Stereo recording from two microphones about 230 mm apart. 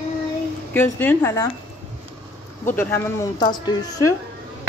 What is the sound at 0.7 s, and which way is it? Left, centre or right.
Speech, centre.